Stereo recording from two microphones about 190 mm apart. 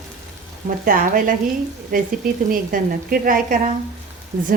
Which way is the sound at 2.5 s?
50° right (ahead or behind).